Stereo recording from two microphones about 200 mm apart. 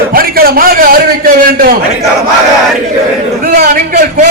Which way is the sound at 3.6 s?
40° right (ahead or behind).